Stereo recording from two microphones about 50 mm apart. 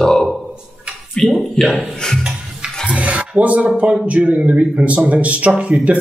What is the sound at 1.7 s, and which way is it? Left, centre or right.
Speech, centre.